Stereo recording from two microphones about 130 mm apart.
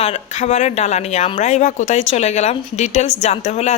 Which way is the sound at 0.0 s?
60° left (ahead or behind).